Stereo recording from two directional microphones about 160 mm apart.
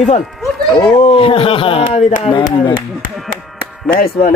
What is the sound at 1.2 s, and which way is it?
Speech, 35° left (ahead or behind).